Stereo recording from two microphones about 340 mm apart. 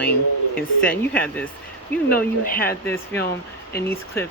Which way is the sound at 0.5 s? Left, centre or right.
Left.